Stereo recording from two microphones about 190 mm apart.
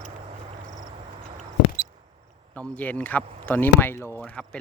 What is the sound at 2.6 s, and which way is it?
Speech, 10° left (ahead or behind).